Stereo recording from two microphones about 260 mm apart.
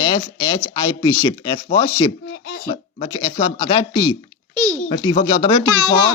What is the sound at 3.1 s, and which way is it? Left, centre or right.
Speech, centre.